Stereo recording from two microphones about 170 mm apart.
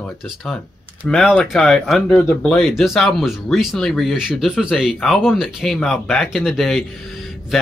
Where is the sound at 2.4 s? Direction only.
Centre (ahead or behind).